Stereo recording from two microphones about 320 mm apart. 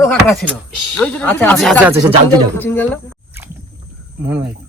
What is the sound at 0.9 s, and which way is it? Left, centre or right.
Speech, centre.